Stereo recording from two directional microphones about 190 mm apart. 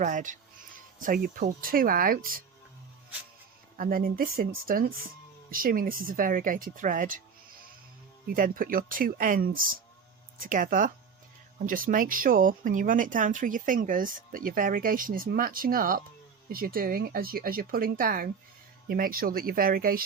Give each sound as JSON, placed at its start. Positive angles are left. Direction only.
{"t": 0.0, "sound": "speech", "side_deg": -40}
{"t": 3.8, "sound": "speech", "side_deg": -50}
{"t": 8.3, "sound": "speech", "side_deg": -50}